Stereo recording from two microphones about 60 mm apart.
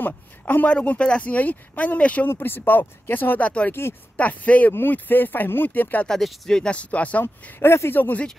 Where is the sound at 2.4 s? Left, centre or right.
Left.